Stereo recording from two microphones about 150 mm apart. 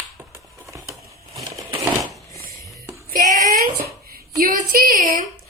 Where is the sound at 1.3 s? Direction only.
20° right (ahead or behind).